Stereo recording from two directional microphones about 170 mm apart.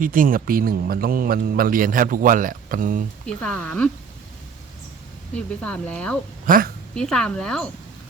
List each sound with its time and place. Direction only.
0.0 s a man's voice: 55° right (ahead or behind)
3.2 s speech: 5° left (ahead or behind)
5.3 s speech: 5° left (ahead or behind)
6.4 s a sound: 55° right (ahead or behind)
6.9 s speech: 5° left (ahead or behind)